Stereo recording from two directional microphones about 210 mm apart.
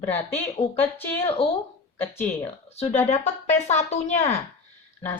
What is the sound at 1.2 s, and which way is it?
Speech, 25° left (ahead or behind).